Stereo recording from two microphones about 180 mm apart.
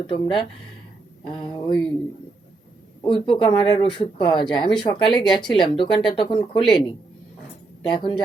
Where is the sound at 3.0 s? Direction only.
25° left (ahead or behind).